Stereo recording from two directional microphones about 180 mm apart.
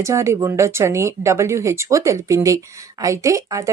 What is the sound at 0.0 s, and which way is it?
A woman's voice, 15° right (ahead or behind).